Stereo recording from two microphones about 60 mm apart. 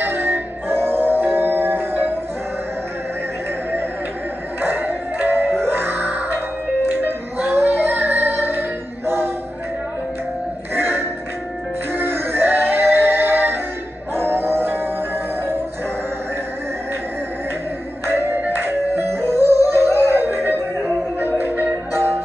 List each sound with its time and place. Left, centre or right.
0.0 s music: right
4.6 s music: right
7.4 s female singing: right
10.7 s music: right
18.0 s music: right